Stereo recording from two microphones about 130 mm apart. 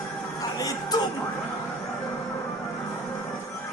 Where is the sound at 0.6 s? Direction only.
25° left (ahead or behind).